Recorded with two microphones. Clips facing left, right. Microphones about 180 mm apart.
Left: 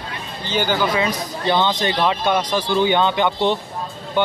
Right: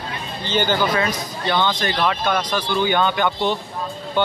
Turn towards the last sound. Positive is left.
turn(degrees=25)  # may be behind; listen again after turning